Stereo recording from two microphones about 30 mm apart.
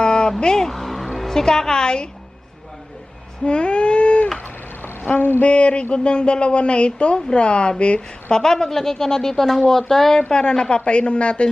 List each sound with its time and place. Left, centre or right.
0.0 s a sound: left
0.6 s music: centre
1.2 s a woman's voice: centre
3.4 s a sound: left
5.4 s speech: left
8.4 s speech: centre
10.3 s speech: left